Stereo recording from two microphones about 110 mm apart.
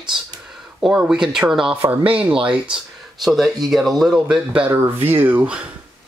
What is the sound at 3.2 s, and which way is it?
Speech, centre (ahead or behind).